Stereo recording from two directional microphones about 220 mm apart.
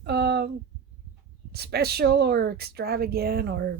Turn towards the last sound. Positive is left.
turn(degrees=-45)  # may be behind; listen again after turning